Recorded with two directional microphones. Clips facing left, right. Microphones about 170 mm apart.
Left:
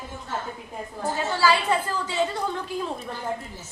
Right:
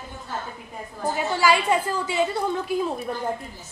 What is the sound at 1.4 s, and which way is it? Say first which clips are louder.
A woman's voice: right 1 dB; 10° right (ahead or behind).